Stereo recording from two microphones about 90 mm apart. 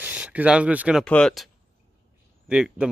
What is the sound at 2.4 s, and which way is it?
Speech, 10° right (ahead or behind).